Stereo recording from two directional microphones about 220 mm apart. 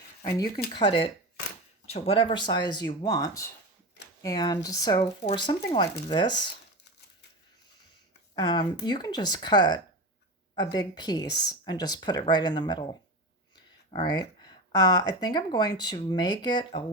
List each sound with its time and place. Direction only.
0.3 s speech: 15° left (ahead or behind)
8.4 s speech: 20° left (ahead or behind)